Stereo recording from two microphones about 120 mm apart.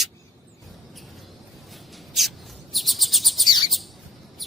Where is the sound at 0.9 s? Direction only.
Centre (ahead or behind).